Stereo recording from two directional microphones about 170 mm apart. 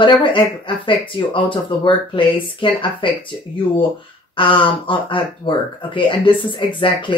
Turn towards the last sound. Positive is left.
turn(degrees=30)  # may be behind; listen again after turning